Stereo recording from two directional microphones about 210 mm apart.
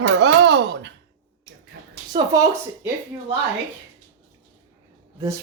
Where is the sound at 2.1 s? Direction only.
20° right (ahead or behind).